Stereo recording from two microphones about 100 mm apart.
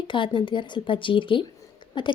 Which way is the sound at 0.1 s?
55° left (ahead or behind).